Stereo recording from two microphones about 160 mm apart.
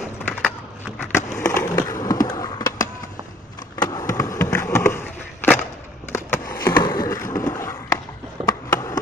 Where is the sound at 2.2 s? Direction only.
25° left (ahead or behind).